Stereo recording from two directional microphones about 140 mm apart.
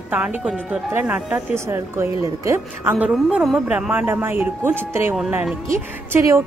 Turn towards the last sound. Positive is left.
turn(degrees=-15)  # may be behind; listen again after turning